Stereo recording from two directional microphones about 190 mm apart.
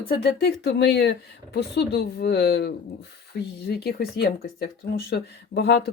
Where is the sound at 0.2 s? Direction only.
60° left (ahead or behind).